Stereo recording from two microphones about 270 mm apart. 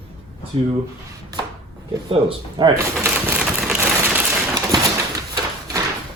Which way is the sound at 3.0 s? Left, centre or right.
Centre.